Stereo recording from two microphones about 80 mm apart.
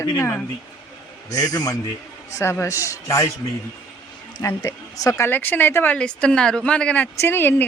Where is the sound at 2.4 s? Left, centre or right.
Left.